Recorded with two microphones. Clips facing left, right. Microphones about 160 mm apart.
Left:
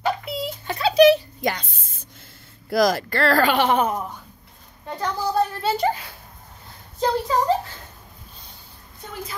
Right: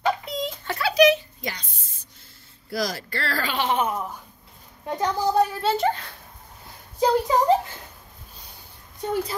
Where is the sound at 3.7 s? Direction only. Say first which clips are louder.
Left 3 dB; 40° left (ahead or behind).